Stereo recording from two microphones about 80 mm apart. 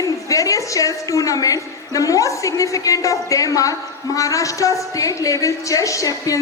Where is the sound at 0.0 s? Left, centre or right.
Left.